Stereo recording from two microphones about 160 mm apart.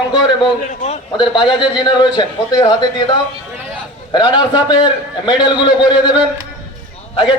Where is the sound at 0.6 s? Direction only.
45° left (ahead or behind).